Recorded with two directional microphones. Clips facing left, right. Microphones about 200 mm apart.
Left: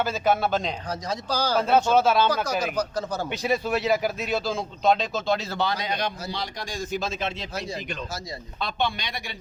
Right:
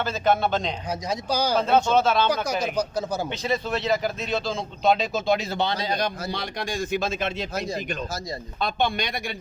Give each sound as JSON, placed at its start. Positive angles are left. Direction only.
{"t": 0.0, "sound": "speech", "side_deg": 5}
{"t": 0.9, "sound": "speech", "side_deg": -15}
{"t": 1.5, "sound": "speech", "side_deg": 10}
{"t": 2.7, "sound": "speech", "side_deg": -10}
{"t": 3.2, "sound": "speech", "side_deg": 10}
{"t": 6.2, "sound": "a man's voice", "side_deg": -60}